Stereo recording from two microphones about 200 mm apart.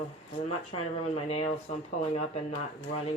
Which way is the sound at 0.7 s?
30° left (ahead or behind).